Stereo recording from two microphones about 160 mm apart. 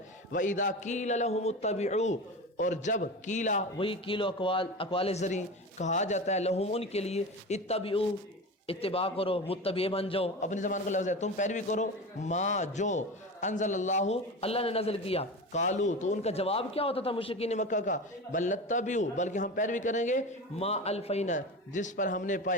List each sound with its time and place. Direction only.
0.3 s a man's voice: 55° left (ahead or behind)
3.8 s a man's voice: 35° left (ahead or behind); by 22.5 s 55° left (ahead or behind)